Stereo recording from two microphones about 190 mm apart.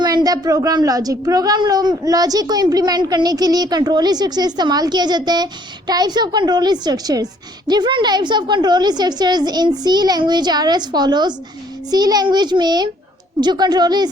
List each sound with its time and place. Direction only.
0.0 s a woman's voice: 20° right (ahead or behind)